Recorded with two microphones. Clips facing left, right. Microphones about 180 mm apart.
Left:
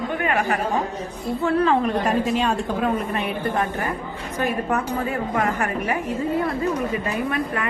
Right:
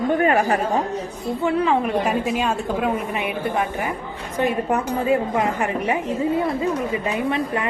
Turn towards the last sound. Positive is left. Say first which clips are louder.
# right 2 dB
turn(degrees=-20)  # may be behind; listen again after turning